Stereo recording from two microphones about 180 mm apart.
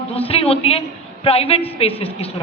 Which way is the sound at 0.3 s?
35° left (ahead or behind).